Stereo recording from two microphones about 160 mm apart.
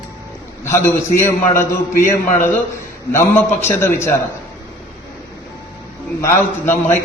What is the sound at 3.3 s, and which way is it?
Speech, 15° left (ahead or behind).